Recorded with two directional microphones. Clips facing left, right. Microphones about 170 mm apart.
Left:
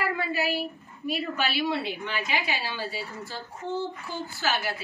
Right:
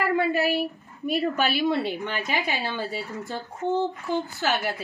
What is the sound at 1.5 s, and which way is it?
A woman's voice, 50° right (ahead or behind).